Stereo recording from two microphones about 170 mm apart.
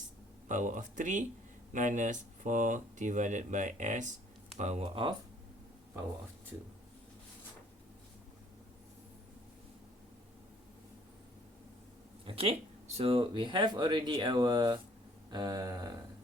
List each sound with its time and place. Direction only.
0.4 s speech: 50° right (ahead or behind); by 5.1 s 30° right (ahead or behind)
12.2 s speech: 35° right (ahead or behind)